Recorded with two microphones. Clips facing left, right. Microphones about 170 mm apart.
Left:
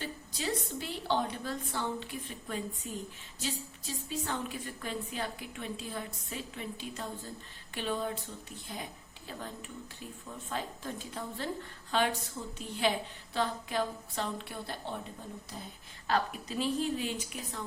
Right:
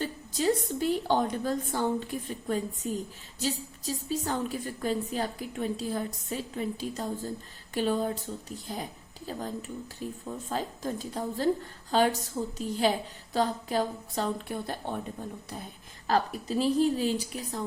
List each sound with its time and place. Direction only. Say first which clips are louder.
0.0 s a woman's voice: right 9 dB; 45° right (ahead or behind)
16.0 s a woman's voice: right 4 dB; 40° right (ahead or behind)